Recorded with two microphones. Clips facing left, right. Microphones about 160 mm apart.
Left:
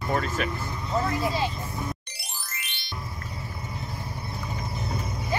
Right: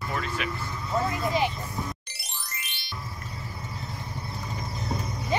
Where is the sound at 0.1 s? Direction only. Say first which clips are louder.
Left 5 dB; 40° left (ahead or behind).